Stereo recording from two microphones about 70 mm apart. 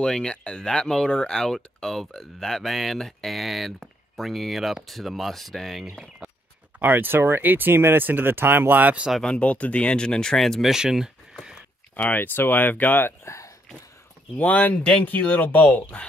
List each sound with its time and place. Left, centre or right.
0.0 s speech: centre
6.8 s speech: right
9.2 s speech: centre
12.0 s speech: left
13.2 s a sound: left
14.3 s speech: left